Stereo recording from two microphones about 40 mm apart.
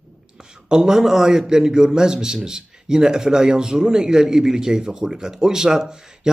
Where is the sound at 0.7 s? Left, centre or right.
Centre.